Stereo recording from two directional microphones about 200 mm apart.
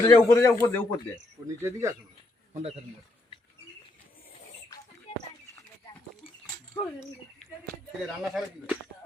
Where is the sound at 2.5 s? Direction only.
30° right (ahead or behind).